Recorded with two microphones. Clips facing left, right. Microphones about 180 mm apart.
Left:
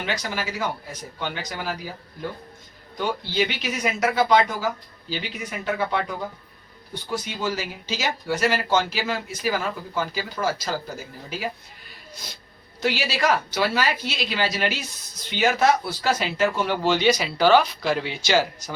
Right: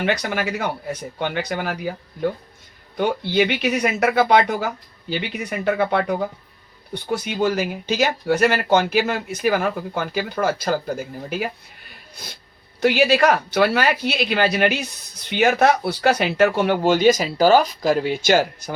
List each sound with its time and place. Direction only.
0.0 s speech: 60° right (ahead or behind)
3.3 s speech: 60° right (ahead or behind)
12.8 s speech: 55° right (ahead or behind)